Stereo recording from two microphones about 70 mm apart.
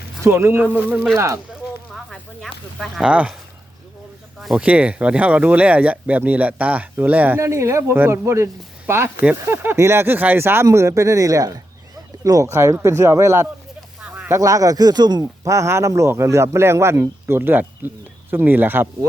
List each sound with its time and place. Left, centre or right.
0.2 s speech: right
1.1 s speech: right
2.0 s speech: centre
4.4 s a sound: centre
4.6 s speech: centre
7.3 s speech: right
8.2 s speech: right
8.9 s speech: right
12.5 s speech: right
14.4 s speech: right
15.2 s speech: right